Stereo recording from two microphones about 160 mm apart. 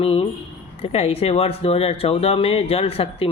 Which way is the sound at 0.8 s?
40° left (ahead or behind).